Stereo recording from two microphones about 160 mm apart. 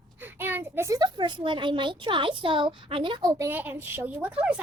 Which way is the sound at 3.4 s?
10° right (ahead or behind).